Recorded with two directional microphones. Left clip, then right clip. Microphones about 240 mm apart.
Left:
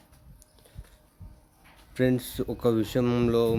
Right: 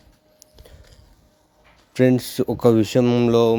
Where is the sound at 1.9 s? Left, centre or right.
Right.